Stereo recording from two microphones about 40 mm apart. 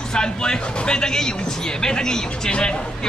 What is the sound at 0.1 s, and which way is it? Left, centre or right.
Speech, centre.